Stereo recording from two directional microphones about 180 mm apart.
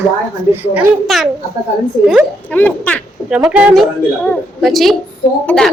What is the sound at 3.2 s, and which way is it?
A child's voice, 5° right (ahead or behind).